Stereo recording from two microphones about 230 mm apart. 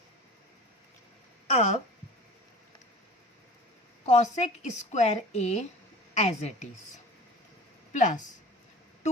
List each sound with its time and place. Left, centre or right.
1.5 s speech: left
4.0 s a woman's voice: left
7.9 s speech: left